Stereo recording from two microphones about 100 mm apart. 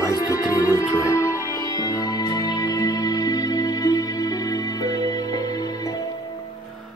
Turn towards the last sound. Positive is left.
turn(degrees=40)  # may be behind; listen again after turning